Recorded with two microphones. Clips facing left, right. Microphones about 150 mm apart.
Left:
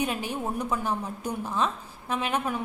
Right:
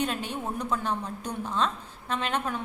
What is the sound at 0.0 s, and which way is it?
A woman's voice, 10° left (ahead or behind).